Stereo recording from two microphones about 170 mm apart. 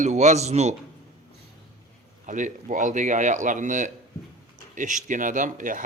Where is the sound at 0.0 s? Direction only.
45° right (ahead or behind).